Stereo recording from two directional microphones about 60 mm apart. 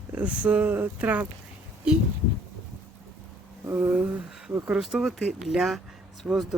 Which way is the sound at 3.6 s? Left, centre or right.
Right.